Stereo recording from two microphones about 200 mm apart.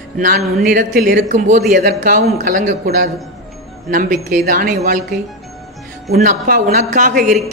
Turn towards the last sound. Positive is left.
turn(degrees=-40)  # may be behind; listen again after turning